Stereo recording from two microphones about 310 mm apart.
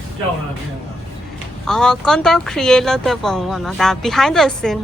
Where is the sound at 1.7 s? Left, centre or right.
Centre.